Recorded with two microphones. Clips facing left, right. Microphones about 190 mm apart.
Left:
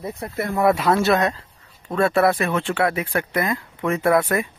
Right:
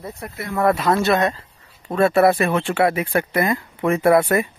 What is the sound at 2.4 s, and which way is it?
Speech, 10° right (ahead or behind).